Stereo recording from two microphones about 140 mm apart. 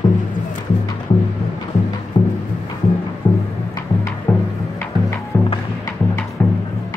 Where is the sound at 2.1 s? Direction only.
35° left (ahead or behind).